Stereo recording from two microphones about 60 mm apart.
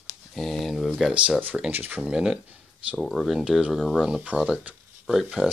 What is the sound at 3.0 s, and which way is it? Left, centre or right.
Speech, centre.